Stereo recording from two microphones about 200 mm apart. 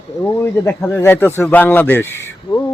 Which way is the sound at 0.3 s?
10° left (ahead or behind).